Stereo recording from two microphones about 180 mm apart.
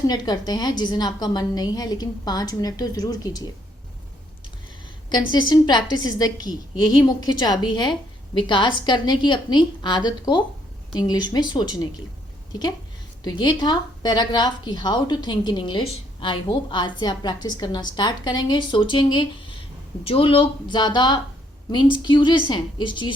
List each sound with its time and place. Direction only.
0.1 s a woman's voice: 20° left (ahead or behind)
5.0 s a woman's voice: 25° left (ahead or behind)
13.2 s a woman's voice: 25° left (ahead or behind)